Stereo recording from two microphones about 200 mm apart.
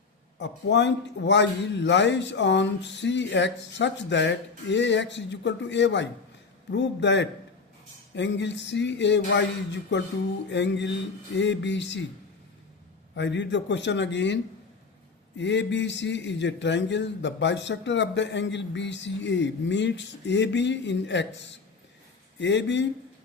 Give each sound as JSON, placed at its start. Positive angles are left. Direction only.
{"t": 0.3, "sound": "a man's voice", "side_deg": 60}
{"t": 13.1, "sound": "a man's voice", "side_deg": 60}
{"t": 15.4, "sound": "a man's voice", "side_deg": 65}
{"t": 22.4, "sound": "a man's voice", "side_deg": 60}